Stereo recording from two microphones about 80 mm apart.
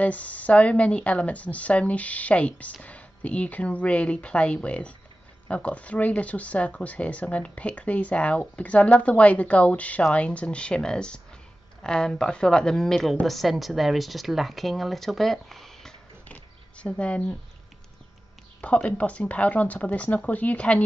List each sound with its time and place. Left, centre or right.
0.0 s a woman's voice: centre
16.3 s a sound: centre
18.6 s speech: centre